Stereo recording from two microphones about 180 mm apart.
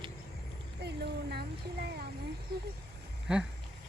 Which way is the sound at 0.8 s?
65° right (ahead or behind).